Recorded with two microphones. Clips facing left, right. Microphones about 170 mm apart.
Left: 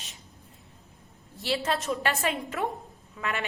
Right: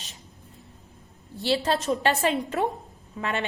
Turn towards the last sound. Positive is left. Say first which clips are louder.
# right 3 dB
turn(degrees=-30)  # may be behind; listen again after turning